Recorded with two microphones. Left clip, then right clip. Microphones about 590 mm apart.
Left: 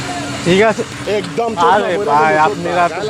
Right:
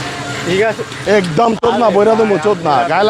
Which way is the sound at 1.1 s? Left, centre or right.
Right.